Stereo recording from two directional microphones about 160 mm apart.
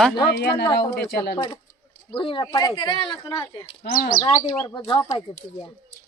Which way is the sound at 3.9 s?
65° left (ahead or behind).